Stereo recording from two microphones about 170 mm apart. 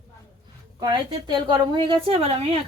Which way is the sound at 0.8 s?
25° right (ahead or behind).